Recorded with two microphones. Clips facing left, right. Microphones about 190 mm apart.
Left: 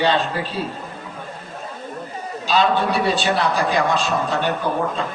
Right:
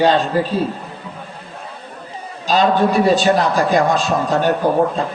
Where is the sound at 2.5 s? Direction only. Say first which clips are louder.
Right 4 dB; 45° right (ahead or behind).